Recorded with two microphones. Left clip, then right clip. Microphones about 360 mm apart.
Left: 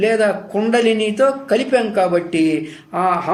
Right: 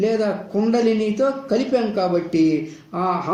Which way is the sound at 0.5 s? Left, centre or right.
Left.